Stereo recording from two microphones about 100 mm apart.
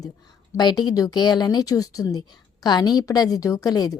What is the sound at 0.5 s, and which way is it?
A woman's voice, 45° left (ahead or behind).